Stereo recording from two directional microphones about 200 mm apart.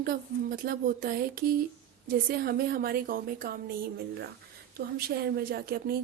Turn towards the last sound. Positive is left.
turn(degrees=-50)  # may be behind; listen again after turning